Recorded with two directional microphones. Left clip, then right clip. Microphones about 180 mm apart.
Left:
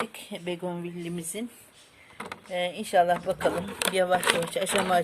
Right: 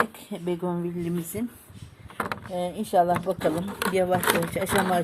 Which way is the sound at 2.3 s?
10° right (ahead or behind).